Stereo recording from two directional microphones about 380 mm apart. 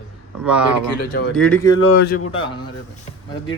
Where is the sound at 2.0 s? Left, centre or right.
Left.